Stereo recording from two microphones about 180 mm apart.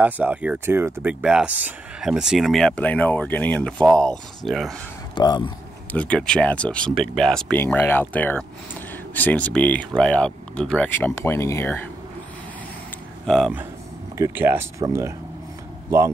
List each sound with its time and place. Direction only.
0.0 s speech: 10° right (ahead or behind)
5.1 s speech: 25° left (ahead or behind)
5.9 s speech: 5° left (ahead or behind)
13.2 s speech: centre (ahead or behind)